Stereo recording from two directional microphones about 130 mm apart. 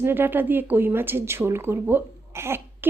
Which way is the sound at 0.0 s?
15° right (ahead or behind).